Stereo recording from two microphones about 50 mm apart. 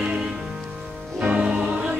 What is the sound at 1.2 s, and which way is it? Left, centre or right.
Music, right.